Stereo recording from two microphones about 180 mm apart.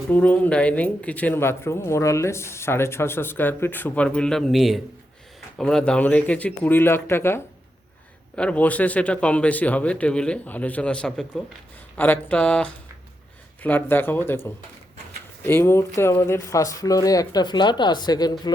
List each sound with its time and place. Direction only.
0.1 s speech: 10° left (ahead or behind)